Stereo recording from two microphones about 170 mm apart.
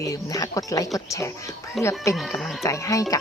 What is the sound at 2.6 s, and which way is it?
Speech, 20° left (ahead or behind).